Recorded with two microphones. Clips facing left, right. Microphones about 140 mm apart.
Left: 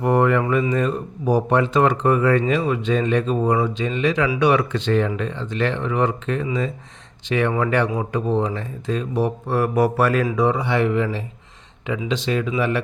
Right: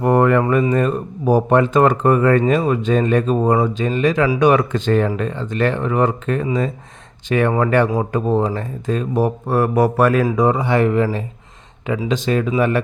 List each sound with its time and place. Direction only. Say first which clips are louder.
0.0 s speech: right 3 dB; 50° right (ahead or behind)